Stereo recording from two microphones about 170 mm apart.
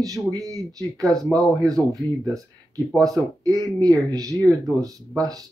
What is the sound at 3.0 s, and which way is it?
Speech, 20° right (ahead or behind).